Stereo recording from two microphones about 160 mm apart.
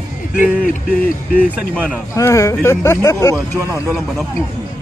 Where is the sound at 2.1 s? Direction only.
15° left (ahead or behind).